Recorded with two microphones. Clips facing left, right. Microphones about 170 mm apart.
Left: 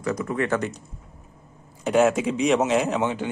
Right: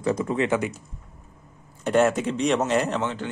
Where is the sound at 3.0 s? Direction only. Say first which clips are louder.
Left 3 dB; 15° left (ahead or behind).